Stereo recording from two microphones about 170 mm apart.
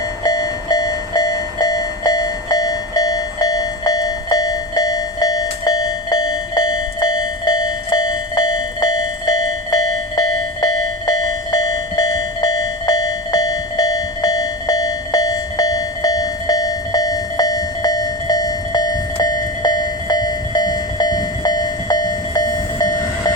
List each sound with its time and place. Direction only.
0.3 s train: 20° left (ahead or behind)
11.5 s a sound: 20° left (ahead or behind)
20.6 s train: 25° left (ahead or behind)